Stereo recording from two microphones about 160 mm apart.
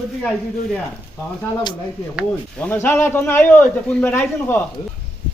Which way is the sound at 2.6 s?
10° left (ahead or behind).